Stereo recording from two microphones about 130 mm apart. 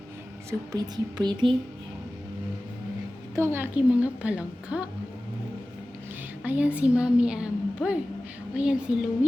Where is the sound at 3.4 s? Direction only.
15° right (ahead or behind).